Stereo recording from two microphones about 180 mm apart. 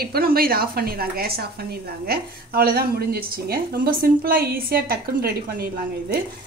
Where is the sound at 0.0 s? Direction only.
55° right (ahead or behind).